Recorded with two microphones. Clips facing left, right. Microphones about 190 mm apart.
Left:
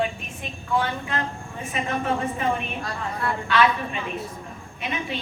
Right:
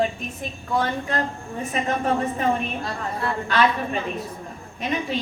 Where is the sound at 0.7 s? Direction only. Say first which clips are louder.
Right 2 dB; 40° right (ahead or behind).